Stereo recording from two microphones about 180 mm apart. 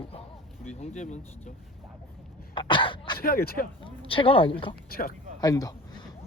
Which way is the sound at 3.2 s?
50° left (ahead or behind).